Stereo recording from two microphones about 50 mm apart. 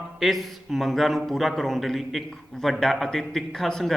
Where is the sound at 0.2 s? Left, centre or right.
Centre.